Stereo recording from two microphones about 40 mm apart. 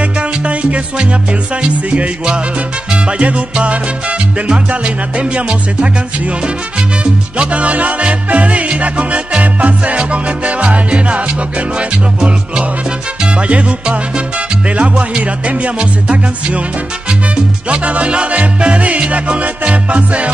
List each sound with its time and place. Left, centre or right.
0.0 s music: right
2.9 s salsa music: right
7.0 s music: right
13.2 s salsa music: right
15.2 s music: right
17.6 s music: right